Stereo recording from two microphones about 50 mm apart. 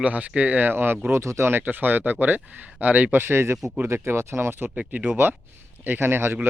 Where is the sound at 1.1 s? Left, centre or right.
Right.